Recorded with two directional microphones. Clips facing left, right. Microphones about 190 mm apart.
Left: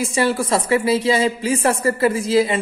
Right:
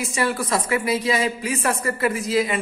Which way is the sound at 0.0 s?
30° left (ahead or behind).